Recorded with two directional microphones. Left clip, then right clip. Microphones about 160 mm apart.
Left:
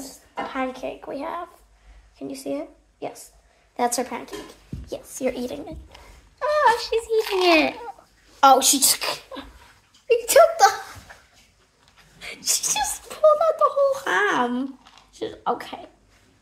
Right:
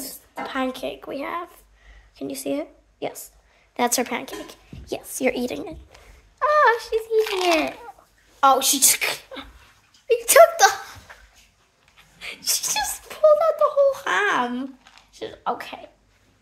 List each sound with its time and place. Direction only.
0.0 s a woman's voice: 45° right (ahead or behind); by 4.3 s 65° right (ahead or behind)
4.8 s speech: 55° right (ahead or behind)
6.4 s a sound: 30° right (ahead or behind)
6.9 s speech: 10° right (ahead or behind)
7.4 s a child's voice: centre (ahead or behind)
8.7 s speech: 25° right (ahead or behind)
12.2 s speech: 15° right (ahead or behind)